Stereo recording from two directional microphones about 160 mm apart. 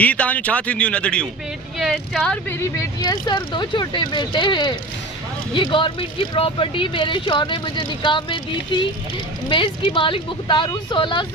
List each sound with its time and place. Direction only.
0.0 s speech: 10° left (ahead or behind)
3.0 s speech: 30° left (ahead or behind)
9.5 s speech: 30° left (ahead or behind)